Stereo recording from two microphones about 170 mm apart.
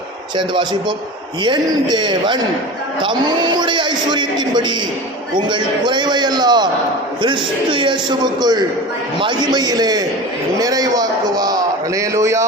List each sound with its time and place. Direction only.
0.3 s a man's voice: 30° right (ahead or behind)